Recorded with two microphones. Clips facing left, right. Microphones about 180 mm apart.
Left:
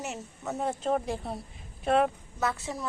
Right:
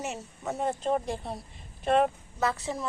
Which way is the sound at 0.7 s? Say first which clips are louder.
Even; centre (ahead or behind).